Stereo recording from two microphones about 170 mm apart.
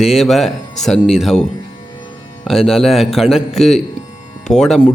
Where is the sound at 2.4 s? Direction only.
Centre (ahead or behind).